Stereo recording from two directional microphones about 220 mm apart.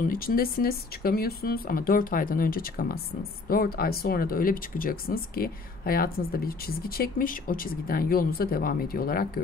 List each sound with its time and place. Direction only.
0.1 s speech: 40° left (ahead or behind)